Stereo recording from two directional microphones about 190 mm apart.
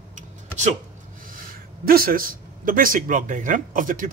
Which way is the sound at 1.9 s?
50° right (ahead or behind).